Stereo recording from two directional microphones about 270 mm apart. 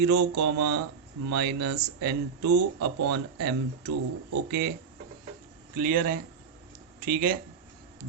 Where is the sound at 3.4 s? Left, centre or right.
Right.